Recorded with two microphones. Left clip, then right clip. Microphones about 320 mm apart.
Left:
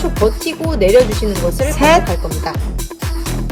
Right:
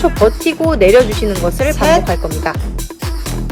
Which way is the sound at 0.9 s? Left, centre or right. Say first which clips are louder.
Right 1 dB; centre.